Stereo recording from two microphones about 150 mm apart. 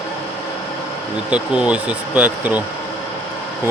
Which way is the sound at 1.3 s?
5° right (ahead or behind).